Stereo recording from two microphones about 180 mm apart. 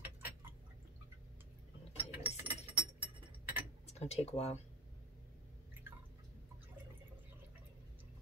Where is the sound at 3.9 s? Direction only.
35° left (ahead or behind).